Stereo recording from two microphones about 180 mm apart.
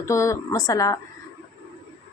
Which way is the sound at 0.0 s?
15° left (ahead or behind).